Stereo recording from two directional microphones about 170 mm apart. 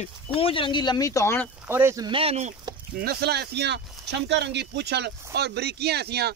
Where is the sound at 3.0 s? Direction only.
70° right (ahead or behind).